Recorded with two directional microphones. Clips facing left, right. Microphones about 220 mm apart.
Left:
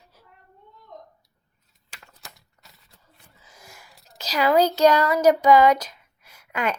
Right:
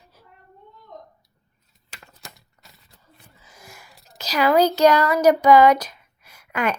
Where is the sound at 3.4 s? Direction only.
25° left (ahead or behind).